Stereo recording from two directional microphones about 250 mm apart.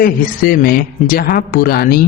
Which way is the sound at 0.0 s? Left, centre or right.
Left.